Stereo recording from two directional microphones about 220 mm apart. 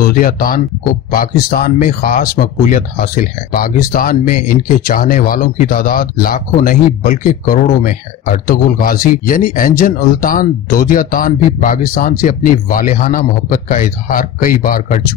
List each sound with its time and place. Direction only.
0.0 s speech: 40° left (ahead or behind)